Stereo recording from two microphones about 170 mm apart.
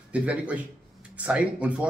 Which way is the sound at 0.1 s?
5° right (ahead or behind).